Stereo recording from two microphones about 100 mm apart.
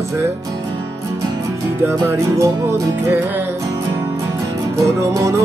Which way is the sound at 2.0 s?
30° right (ahead or behind).